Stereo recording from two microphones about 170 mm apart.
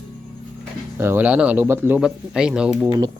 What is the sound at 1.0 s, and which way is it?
Speech, 10° right (ahead or behind).